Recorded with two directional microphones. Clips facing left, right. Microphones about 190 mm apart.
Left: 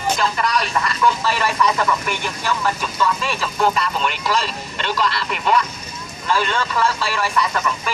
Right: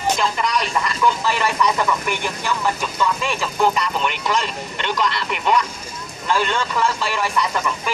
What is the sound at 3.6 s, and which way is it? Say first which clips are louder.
Speech: even; 15° right (ahead or behind).